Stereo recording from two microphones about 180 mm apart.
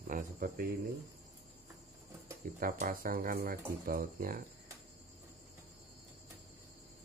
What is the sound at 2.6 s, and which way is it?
Speech, 50° right (ahead or behind).